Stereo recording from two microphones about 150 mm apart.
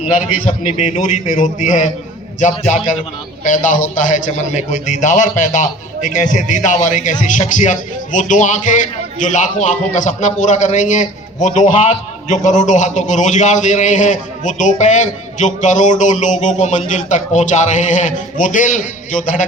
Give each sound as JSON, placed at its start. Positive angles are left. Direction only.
{"t": 0.8, "sound": "a man's voice", "side_deg": 55}